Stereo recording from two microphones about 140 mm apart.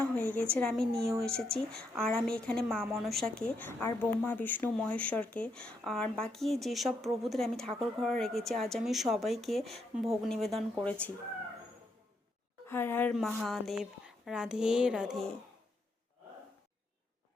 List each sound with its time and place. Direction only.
0.0 s a sound: 10° left (ahead or behind)
0.5 s a woman's voice: 5° left (ahead or behind)
12.6 s a woman's voice: 15° left (ahead or behind)
13.1 s speech: centre (ahead or behind)